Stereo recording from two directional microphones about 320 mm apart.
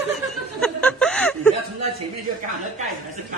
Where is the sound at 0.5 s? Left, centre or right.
Centre.